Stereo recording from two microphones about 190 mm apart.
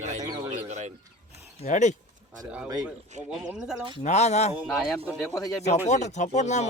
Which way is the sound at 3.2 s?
5° right (ahead or behind).